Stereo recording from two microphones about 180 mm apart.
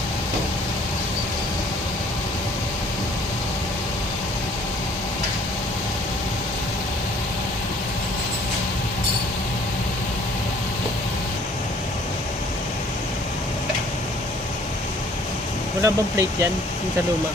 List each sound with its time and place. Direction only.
15.8 s speech: 15° right (ahead or behind)